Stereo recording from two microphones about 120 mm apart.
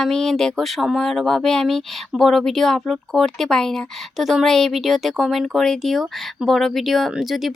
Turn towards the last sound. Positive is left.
turn(degrees=-5)  # may be behind; listen again after turning